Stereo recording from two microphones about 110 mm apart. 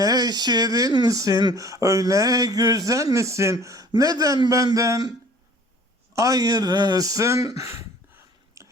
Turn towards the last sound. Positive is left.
turn(degrees=-30)  # may be behind; listen again after turning